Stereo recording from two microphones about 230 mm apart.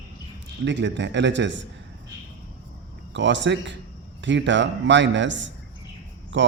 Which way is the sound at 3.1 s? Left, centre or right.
Right.